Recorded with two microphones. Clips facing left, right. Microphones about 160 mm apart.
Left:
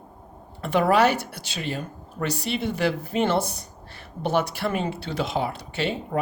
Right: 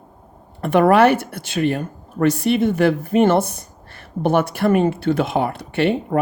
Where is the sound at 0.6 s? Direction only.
55° right (ahead or behind).